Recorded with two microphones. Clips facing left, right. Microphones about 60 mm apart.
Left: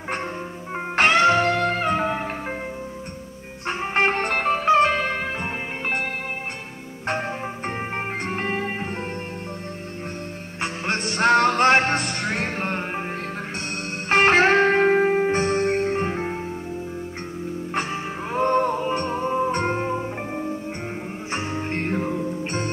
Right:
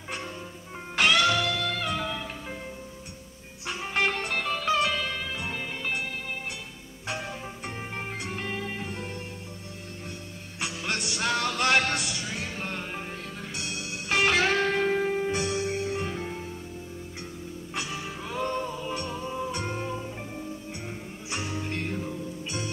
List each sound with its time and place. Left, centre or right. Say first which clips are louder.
0.9 s music: left 6 dB; left
3.6 s music: left 6 dB; left
7.1 s music: left 8 dB; left
10.6 s music: left 6 dB; left
14.0 s music: left 7 dB; left
18.3 s music: left 10 dB; left